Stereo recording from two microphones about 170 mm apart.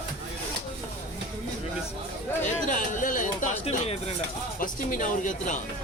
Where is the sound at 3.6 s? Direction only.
35° left (ahead or behind).